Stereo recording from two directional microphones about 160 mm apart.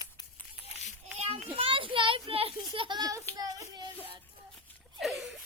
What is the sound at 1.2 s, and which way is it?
A child's voice, 40° right (ahead or behind).